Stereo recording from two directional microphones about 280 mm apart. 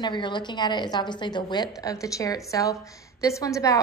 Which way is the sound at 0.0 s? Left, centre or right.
Centre.